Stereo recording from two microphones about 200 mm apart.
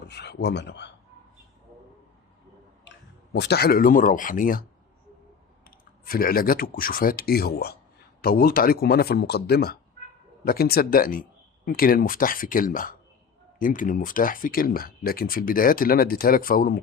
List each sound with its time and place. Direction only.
0.1 s speech: 55° left (ahead or behind)
3.3 s speech: 55° left (ahead or behind)
5.6 s speech: 45° left (ahead or behind)